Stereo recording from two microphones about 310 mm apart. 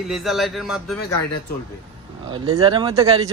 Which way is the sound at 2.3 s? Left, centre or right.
Centre.